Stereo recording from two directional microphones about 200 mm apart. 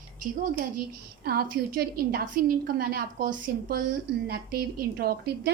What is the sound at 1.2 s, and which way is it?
A woman's voice, 50° right (ahead or behind).